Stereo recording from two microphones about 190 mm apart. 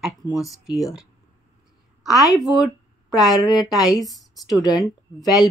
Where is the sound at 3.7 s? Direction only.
Centre (ahead or behind).